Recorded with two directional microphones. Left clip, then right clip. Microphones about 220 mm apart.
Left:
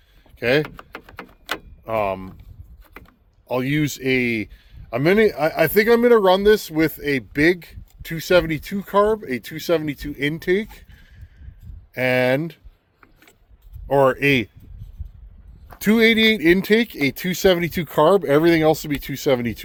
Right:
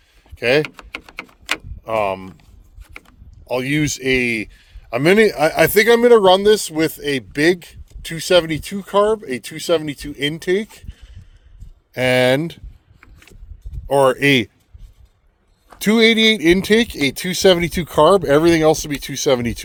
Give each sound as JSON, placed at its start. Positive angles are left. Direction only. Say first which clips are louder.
{"t": 0.3, "sound": "a sound", "louder": "right 3 dB", "side_deg": -25}
{"t": 3.4, "sound": "speech", "louder": "right 3 dB", "side_deg": -25}
{"t": 13.8, "sound": "speech", "louder": "right 3 dB", "side_deg": -40}
{"t": 15.8, "sound": "speech", "louder": "right 3 dB", "side_deg": -25}